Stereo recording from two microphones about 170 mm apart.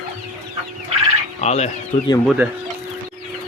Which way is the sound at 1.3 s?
40° left (ahead or behind).